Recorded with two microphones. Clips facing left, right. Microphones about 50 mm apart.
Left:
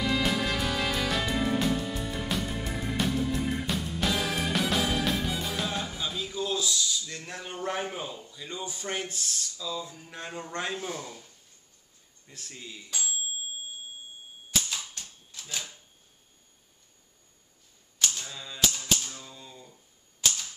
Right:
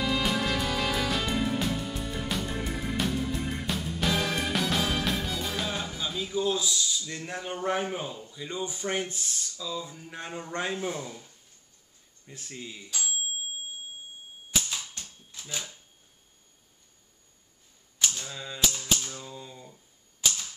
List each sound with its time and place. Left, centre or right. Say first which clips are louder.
0.0 s music: even; centre
6.3 s a sound: right 3 dB; centre
7.2 s a man's voice: right 3 dB; centre
12.3 s a man's voice: right 3 dB; centre
14.5 s typewriter: even; centre
17.9 s typewriter: even; centre
18.7 s typewriter: even; centre
19.0 s typewriter: right 4 dB; centre